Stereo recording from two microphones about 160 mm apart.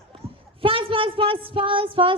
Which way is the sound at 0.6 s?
35° right (ahead or behind).